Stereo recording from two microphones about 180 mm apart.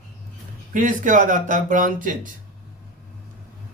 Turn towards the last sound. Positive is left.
turn(degrees=-45)  # may be behind; listen again after turning